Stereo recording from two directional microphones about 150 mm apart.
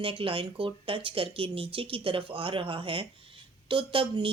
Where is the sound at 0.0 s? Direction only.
35° right (ahead or behind).